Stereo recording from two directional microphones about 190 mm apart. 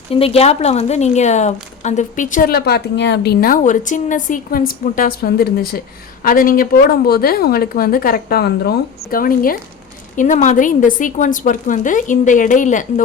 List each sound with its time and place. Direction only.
0.1 s a woman's voice: 30° left (ahead or behind)